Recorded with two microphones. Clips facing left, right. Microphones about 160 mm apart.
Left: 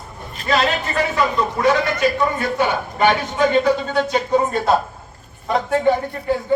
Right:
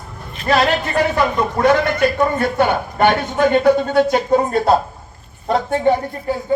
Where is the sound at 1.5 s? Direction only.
55° right (ahead or behind).